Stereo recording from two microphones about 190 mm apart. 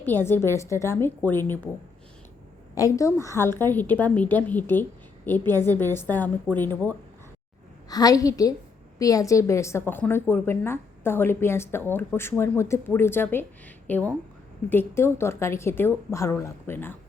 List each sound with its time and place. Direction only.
0.0 s a woman's voice: 10° left (ahead or behind)
2.7 s a woman's voice: 15° left (ahead or behind)
7.9 s a woman's voice: 20° left (ahead or behind)